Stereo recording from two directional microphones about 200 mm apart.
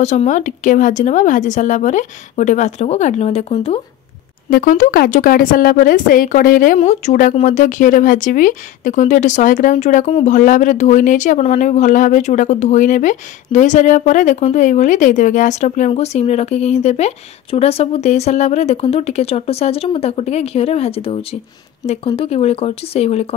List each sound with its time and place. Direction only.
0.0 s speech: 35° left (ahead or behind)
4.5 s a woman's voice: 45° left (ahead or behind)